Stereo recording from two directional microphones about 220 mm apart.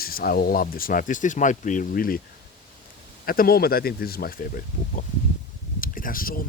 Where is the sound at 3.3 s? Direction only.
40° left (ahead or behind).